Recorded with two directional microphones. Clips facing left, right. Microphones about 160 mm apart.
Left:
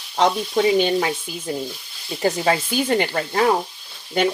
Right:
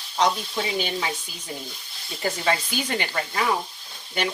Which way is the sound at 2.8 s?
50° left (ahead or behind).